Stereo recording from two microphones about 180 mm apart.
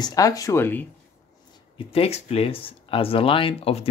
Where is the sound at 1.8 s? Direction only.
30° left (ahead or behind).